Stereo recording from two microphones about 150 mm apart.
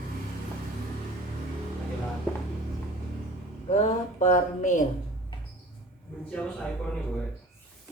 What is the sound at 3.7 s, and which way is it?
A woman's voice, 55° left (ahead or behind).